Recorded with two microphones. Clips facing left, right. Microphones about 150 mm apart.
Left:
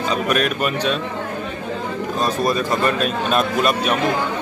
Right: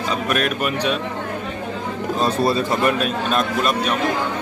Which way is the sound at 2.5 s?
25° right (ahead or behind).